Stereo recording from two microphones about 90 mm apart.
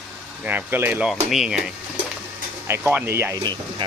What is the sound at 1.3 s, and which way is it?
Speech, 5° right (ahead or behind).